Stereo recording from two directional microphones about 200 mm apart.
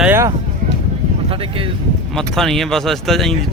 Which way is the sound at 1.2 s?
25° right (ahead or behind).